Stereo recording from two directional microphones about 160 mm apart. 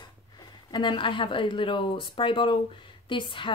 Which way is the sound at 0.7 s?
30° left (ahead or behind).